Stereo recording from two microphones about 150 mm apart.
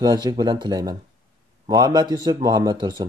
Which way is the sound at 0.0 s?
25° right (ahead or behind).